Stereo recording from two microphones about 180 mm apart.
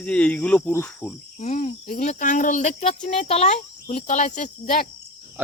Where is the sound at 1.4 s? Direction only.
40° left (ahead or behind).